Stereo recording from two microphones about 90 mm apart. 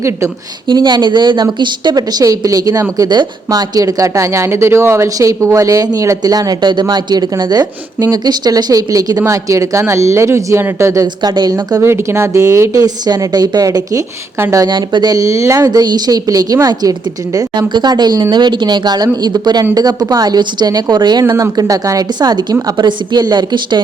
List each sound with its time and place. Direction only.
0.7 s a woman's voice: 55° right (ahead or behind); by 11.0 s 30° right (ahead or behind)
11.0 s a woman's voice: 50° right (ahead or behind)
11.8 s speech: 30° right (ahead or behind)
14.7 s speech: 55° right (ahead or behind)
15.1 s speech: 35° right (ahead or behind)
17.5 s a woman's voice: 55° right (ahead or behind)
21.3 s a woman's voice: 40° right (ahead or behind)